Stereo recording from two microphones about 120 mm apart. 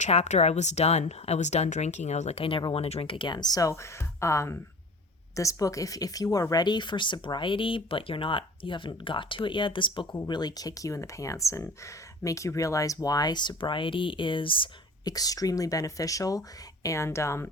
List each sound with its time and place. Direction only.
0.0 s speech: 70° left (ahead or behind)
2.4 s speech: 45° left (ahead or behind)
15.1 s speech: 30° left (ahead or behind)